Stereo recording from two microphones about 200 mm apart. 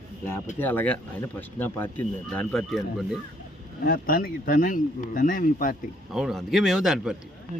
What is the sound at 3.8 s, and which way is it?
Speech, 45° left (ahead or behind).